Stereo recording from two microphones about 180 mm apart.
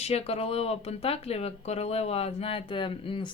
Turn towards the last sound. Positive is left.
turn(degrees=30)  # may be behind; listen again after turning